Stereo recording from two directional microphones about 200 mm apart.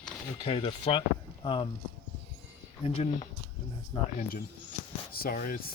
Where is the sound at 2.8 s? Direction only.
30° left (ahead or behind).